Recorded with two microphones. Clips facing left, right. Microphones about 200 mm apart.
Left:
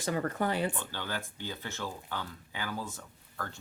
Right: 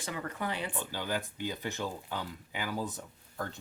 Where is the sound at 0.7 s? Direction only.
15° right (ahead or behind).